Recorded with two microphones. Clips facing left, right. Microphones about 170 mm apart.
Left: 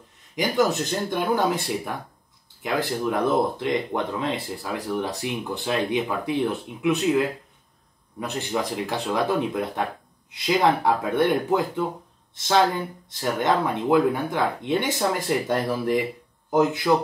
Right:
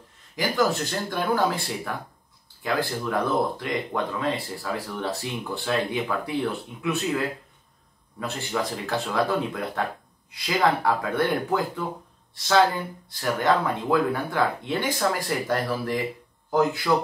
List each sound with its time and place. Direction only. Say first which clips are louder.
0.4 s speech: left 2 dB; 20° left (ahead or behind)
2.6 s speech: left 2 dB; 20° left (ahead or behind)
8.2 s speech: left 1 dB; 20° left (ahead or behind)
13.1 s speech: even; 20° left (ahead or behind)